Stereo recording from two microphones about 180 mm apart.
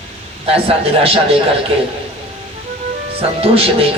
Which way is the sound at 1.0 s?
30° right (ahead or behind).